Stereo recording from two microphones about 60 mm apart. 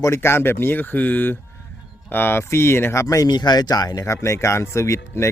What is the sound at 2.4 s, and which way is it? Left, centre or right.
Speech, left.